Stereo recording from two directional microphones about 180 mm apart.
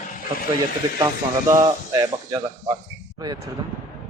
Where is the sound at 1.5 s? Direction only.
20° right (ahead or behind).